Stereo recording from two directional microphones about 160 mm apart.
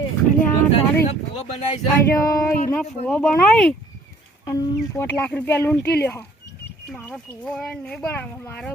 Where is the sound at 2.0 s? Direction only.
20° left (ahead or behind).